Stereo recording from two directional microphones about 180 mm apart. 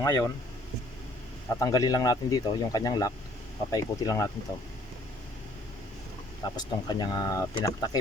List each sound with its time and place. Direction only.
0.0 s speech: 15° left (ahead or behind)
1.5 s speech: 20° left (ahead or behind)
6.4 s speech: 25° left (ahead or behind)